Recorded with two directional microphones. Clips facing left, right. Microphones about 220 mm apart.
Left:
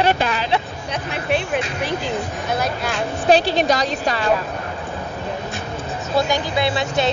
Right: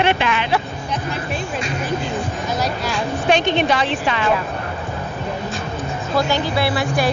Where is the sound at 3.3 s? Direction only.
35° left (ahead or behind).